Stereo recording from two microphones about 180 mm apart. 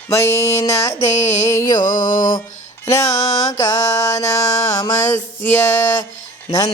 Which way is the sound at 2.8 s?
15° left (ahead or behind).